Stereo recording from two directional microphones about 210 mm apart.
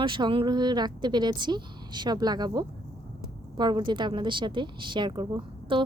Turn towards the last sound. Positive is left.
turn(degrees=-20)  # may be behind; listen again after turning